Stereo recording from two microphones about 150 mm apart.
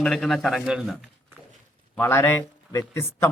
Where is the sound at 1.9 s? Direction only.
15° left (ahead or behind).